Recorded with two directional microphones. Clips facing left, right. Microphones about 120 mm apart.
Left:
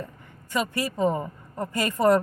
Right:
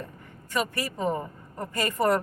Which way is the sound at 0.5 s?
20° left (ahead or behind).